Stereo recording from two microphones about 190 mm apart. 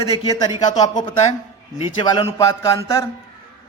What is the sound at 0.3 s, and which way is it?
A man's voice, 20° left (ahead or behind).